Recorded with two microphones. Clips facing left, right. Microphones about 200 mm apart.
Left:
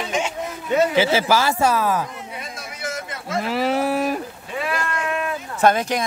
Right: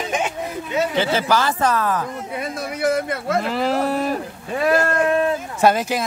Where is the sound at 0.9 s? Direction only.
10° left (ahead or behind).